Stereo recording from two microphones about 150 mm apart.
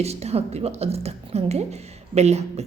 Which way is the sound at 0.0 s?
45° right (ahead or behind).